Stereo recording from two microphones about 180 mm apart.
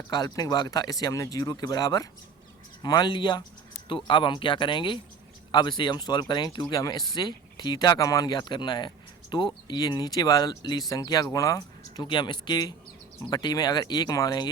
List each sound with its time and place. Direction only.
0.1 s speech: 20° left (ahead or behind)